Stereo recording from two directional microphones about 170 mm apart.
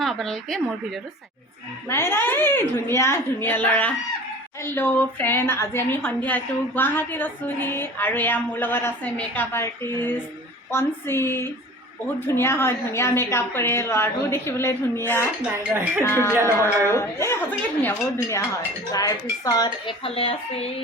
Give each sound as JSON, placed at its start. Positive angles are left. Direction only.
{"t": 0.0, "sound": "speech", "side_deg": 0}
{"t": 1.9, "sound": "a woman's voice", "side_deg": 15}
{"t": 15.4, "sound": "speech", "side_deg": -10}
{"t": 16.0, "sound": "a woman's voice", "side_deg": 15}
{"t": 16.3, "sound": "speech", "side_deg": -15}
{"t": 16.9, "sound": "a woman's voice", "side_deg": 15}
{"t": 20.1, "sound": "speech", "side_deg": 35}